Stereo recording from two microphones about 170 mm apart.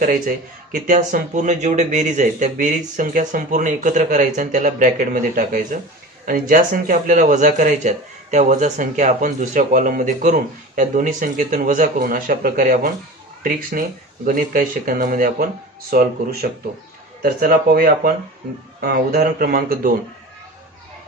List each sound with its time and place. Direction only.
0.7 s speech: 50° right (ahead or behind)